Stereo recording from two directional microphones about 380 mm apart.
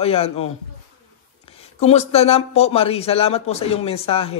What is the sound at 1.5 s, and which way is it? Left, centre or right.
Speech, centre.